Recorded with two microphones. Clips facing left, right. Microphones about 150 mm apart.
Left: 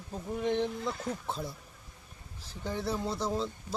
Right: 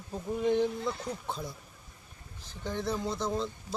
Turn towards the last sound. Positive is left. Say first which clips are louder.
# even
turn(degrees=5)  # may be behind; listen again after turning